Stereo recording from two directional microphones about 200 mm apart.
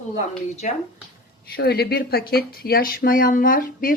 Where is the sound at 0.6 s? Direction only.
35° left (ahead or behind).